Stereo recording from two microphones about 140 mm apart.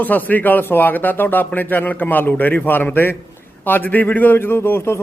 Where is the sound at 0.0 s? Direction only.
10° left (ahead or behind).